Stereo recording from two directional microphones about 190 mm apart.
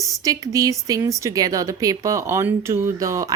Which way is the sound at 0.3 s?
15° right (ahead or behind).